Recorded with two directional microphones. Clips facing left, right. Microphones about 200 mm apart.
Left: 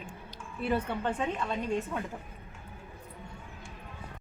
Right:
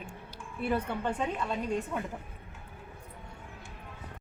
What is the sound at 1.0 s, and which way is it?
A woman's voice, 10° right (ahead or behind).